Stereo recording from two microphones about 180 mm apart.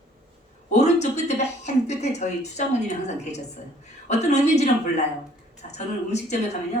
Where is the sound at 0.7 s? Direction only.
40° left (ahead or behind).